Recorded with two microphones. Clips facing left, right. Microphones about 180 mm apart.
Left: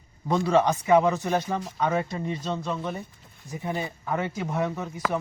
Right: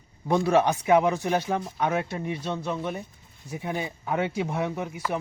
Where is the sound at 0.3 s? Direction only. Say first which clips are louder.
Even; 10° right (ahead or behind).